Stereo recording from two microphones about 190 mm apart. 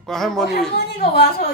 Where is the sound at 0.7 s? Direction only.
55° left (ahead or behind).